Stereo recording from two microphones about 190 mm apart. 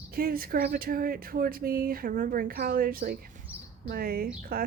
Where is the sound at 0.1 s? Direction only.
50° right (ahead or behind).